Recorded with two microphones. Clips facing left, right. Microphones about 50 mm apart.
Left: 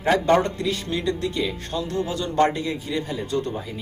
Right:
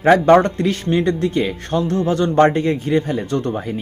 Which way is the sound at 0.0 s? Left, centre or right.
Right.